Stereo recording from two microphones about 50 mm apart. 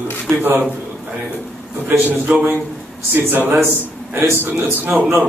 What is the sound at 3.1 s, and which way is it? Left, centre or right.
A man's voice, right.